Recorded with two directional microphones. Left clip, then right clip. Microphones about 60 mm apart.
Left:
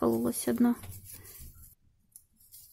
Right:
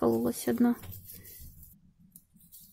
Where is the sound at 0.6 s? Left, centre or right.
Centre.